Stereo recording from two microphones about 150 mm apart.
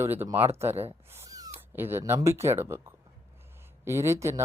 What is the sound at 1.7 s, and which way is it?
Speech, 15° right (ahead or behind).